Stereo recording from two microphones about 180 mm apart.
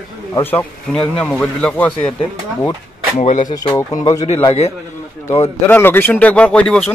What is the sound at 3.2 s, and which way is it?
Speech, 45° left (ahead or behind).